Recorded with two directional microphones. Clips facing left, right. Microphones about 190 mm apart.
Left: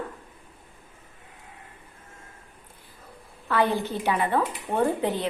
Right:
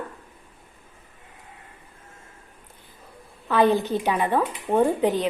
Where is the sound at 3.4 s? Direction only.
20° right (ahead or behind).